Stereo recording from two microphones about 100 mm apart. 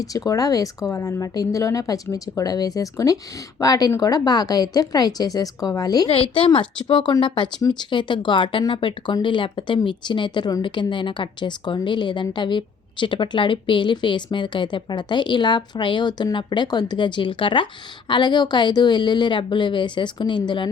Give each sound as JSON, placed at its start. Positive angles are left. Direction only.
{"t": 0.3, "sound": "a woman's voice", "side_deg": 35}
{"t": 6.1, "sound": "a woman's voice", "side_deg": 70}